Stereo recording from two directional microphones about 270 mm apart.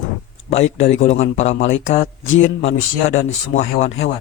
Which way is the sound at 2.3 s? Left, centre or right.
Left.